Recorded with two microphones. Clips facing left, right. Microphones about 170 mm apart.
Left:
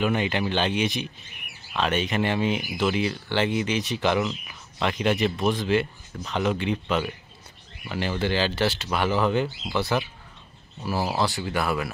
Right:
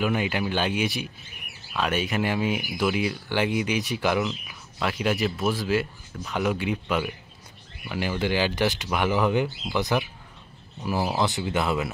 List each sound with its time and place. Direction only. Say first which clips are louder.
0.0 s speech: left 1 dB; 5° right (ahead or behind)
11.1 s speech: right 1 dB; 20° right (ahead or behind)